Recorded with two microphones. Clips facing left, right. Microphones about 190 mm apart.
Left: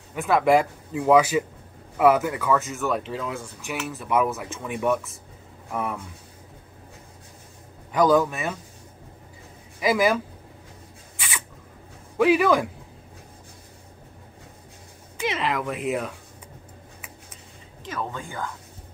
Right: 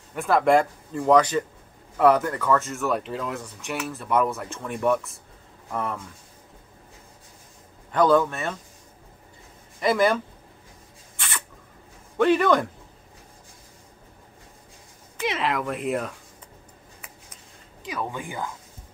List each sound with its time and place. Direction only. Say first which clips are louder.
0.1 s a man's voice: even; centre (ahead or behind)
7.9 s a man's voice: even; 5° left (ahead or behind)
9.8 s speech: even; 5° left (ahead or behind)
11.1 s a sound: even; 5° left (ahead or behind)
12.2 s speech: even; 5° left (ahead or behind)
15.1 s speech: even; centre (ahead or behind)
18.0 s speech: right 2 dB; 15° right (ahead or behind)